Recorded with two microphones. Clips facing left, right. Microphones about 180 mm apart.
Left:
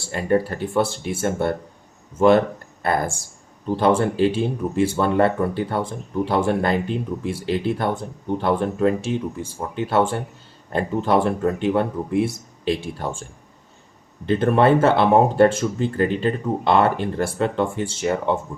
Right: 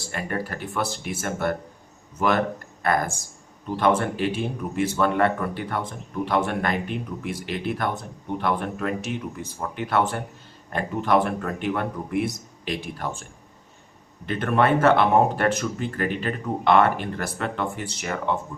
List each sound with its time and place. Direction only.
0.1 s speech: 30° left (ahead or behind)
14.3 s speech: 30° left (ahead or behind)